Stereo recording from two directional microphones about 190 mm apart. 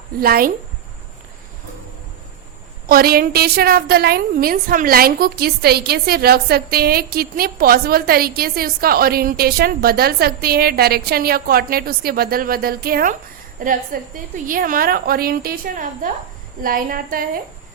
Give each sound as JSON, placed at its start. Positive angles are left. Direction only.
{"t": 0.2, "sound": "a woman's voice", "side_deg": -50}
{"t": 2.9, "sound": "a woman's voice", "side_deg": -50}